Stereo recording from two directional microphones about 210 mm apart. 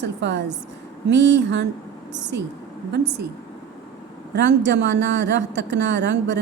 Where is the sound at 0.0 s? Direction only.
55° right (ahead or behind).